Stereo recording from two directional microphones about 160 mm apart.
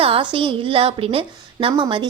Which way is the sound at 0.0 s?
35° right (ahead or behind).